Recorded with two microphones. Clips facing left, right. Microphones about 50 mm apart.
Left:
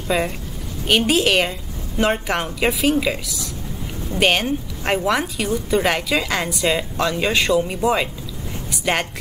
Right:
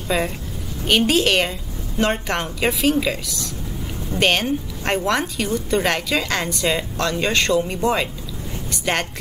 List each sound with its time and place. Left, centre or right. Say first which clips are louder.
0.1 s a woman's voice: right 1 dB; centre